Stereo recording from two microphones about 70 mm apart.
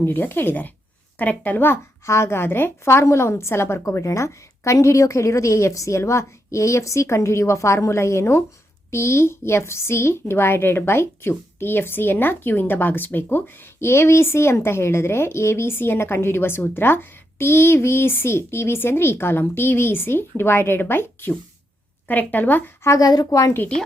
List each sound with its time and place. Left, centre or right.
0.0 s a woman's voice: left
23.0 s a woman's voice: left